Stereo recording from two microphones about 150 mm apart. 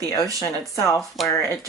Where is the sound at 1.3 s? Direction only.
20° left (ahead or behind).